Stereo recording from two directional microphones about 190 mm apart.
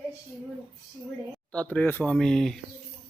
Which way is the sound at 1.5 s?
5° left (ahead or behind).